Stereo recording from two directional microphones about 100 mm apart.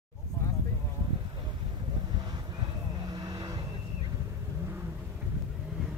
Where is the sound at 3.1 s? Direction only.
45° right (ahead or behind).